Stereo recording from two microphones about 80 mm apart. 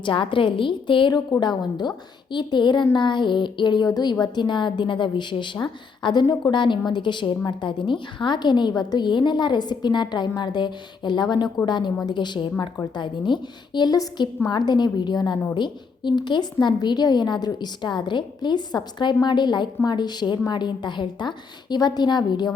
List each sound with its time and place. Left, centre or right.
0.0 s a woman's voice: left
1.4 s a woman's voice: left